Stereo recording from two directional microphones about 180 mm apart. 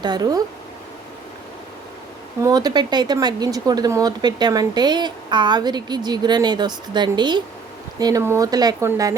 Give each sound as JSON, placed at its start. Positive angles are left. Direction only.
{"t": 0.0, "sound": "speech", "side_deg": -20}
{"t": 2.4, "sound": "speech", "side_deg": -20}